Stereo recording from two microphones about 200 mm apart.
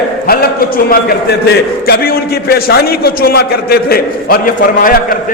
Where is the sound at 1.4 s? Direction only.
50° left (ahead or behind).